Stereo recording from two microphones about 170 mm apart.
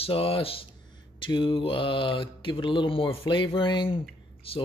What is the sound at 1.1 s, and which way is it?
Mantra, 30° left (ahead or behind).